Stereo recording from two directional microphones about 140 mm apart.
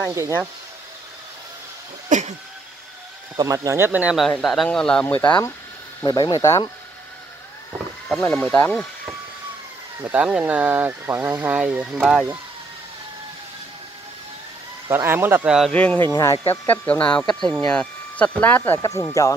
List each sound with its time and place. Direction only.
0.0 s speech: 20° right (ahead or behind)
2.0 s cough: 60° right (ahead or behind)
3.3 s speech: 20° right (ahead or behind)
4.3 s speech: centre (ahead or behind)
6.0 s speech: 30° left (ahead or behind)
8.2 s speech: 10° left (ahead or behind)
10.0 s speech: 10° right (ahead or behind)
14.9 s speech: 15° right (ahead or behind)
15.7 s speech: 10° left (ahead or behind)
16.1 s speech: 20° left (ahead or behind)
18.8 s speech: 25° left (ahead or behind)